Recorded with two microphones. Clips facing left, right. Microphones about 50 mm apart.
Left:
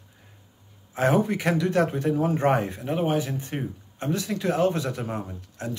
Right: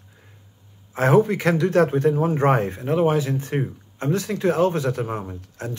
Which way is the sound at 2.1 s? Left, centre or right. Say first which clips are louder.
Right 3 dB; right.